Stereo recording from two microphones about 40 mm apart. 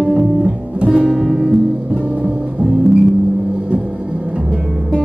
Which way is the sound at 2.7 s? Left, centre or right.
Centre.